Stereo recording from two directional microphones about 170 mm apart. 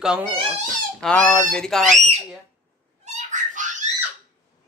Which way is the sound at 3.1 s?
45° right (ahead or behind).